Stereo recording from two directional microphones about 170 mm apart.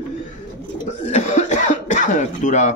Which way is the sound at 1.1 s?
45° left (ahead or behind).